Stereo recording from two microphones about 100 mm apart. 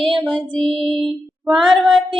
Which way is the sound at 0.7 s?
5° left (ahead or behind).